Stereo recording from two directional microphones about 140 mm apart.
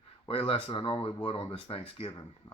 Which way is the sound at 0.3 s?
40° left (ahead or behind).